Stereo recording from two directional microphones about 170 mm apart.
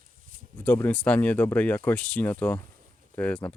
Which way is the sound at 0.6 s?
10° left (ahead or behind).